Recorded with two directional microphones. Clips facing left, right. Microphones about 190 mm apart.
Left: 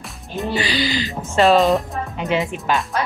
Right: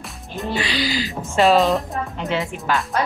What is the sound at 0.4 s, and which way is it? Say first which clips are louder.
Speech: left 2 dB; centre (ahead or behind).